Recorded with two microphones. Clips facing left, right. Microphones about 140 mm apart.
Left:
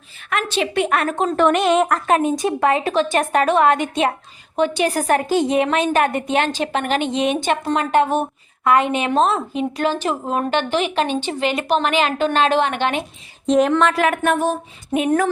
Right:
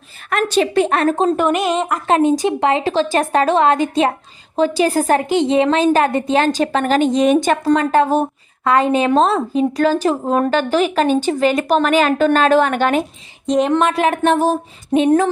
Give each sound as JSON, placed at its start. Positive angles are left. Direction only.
{"t": 0.3, "sound": "a woman's voice", "side_deg": -40}
{"t": 1.4, "sound": "speech", "side_deg": -5}
{"t": 2.0, "sound": "a sound", "side_deg": -30}
{"t": 2.4, "sound": "a woman's voice", "side_deg": -25}
{"t": 13.5, "sound": "speech", "side_deg": 0}
{"t": 13.7, "sound": "a sound", "side_deg": -20}